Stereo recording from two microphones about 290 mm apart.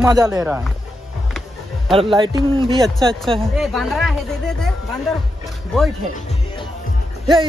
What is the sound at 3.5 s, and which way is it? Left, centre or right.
Speech, centre.